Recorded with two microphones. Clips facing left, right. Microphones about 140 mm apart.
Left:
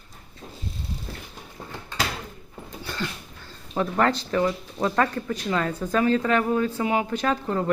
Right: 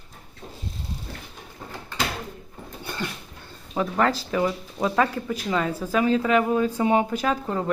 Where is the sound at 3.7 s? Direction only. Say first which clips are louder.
Even; centre (ahead or behind).